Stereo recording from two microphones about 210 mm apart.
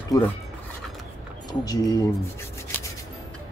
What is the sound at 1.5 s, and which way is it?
Speech, 20° left (ahead or behind).